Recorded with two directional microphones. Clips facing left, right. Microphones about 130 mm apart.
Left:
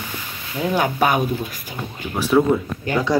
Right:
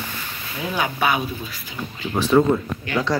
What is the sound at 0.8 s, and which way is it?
Speech, 45° left (ahead or behind).